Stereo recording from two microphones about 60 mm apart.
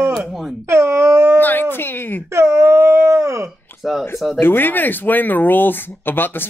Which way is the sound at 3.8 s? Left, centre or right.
Centre.